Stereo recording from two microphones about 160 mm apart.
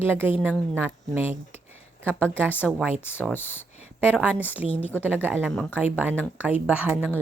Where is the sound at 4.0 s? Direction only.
10° right (ahead or behind).